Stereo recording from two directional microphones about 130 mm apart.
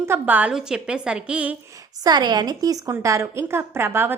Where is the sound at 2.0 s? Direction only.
30° right (ahead or behind).